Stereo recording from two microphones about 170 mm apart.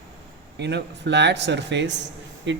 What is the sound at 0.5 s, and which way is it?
Speech, 90° right.